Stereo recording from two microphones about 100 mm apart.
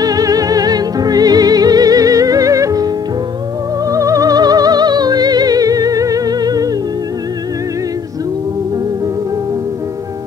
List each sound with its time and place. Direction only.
0.0 s music: 40° right (ahead or behind)
3.9 s music: 35° right (ahead or behind)